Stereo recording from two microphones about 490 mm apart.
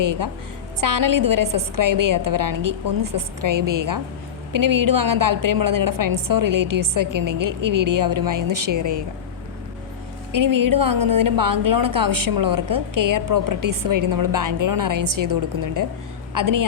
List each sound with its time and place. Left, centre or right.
0.0 s a woman's voice: right
10.3 s a woman's voice: right